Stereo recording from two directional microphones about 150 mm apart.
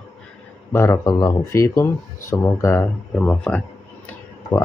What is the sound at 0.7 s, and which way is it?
Speech, 20° left (ahead or behind).